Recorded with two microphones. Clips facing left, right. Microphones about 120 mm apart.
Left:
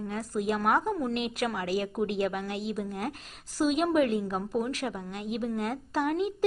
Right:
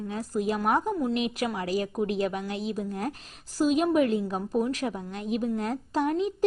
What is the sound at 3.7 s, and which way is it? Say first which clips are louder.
A child's voice: right 2 dB; 25° right (ahead or behind).